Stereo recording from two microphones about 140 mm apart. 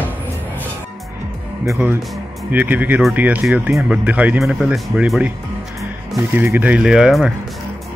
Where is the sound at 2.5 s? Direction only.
10° right (ahead or behind).